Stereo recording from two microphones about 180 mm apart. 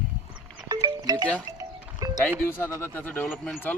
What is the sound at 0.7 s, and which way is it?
Music, 20° right (ahead or behind).